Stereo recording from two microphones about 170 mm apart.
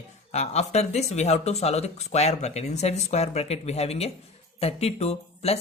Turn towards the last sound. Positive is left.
turn(degrees=35)  # may be behind; listen again after turning